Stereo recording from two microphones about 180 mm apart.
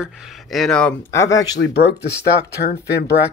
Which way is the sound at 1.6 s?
70° left (ahead or behind).